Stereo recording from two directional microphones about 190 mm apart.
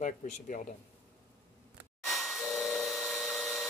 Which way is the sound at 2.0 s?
Centre (ahead or behind).